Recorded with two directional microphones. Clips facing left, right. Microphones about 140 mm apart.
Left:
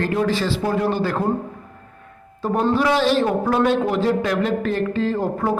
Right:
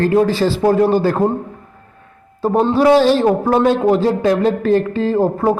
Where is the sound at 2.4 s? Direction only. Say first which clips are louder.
Right 5 dB; 35° right (ahead or behind).